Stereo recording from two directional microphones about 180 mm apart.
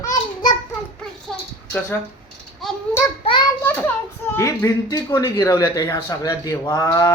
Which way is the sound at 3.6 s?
10° left (ahead or behind).